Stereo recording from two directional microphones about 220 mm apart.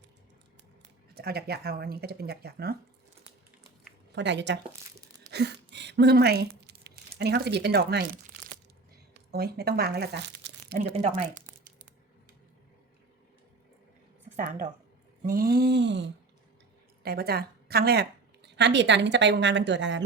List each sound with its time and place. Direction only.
1.1 s speech: 45° right (ahead or behind)
4.1 s speech: 55° right (ahead or behind)
9.1 s speech: 45° right (ahead or behind)
10.8 s speech: 30° right (ahead or behind)
14.3 s a woman's voice: 30° right (ahead or behind); by 20.1 s 55° right (ahead or behind)